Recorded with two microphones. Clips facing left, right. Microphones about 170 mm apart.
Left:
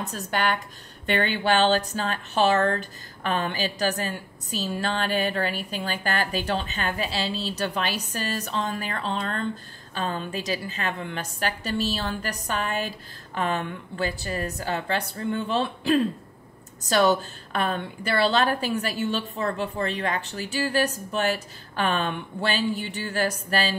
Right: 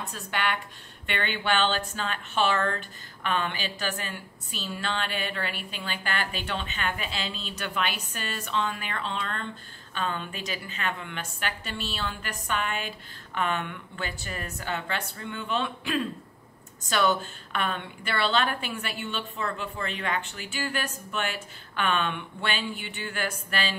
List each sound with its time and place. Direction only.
0.0 s speech: 40° left (ahead or behind)